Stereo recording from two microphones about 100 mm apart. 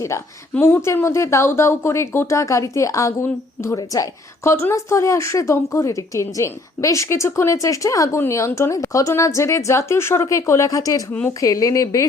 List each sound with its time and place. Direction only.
0.1 s a woman's voice: 30° left (ahead or behind)